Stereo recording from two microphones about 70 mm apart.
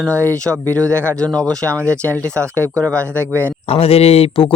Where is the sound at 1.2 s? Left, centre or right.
Centre.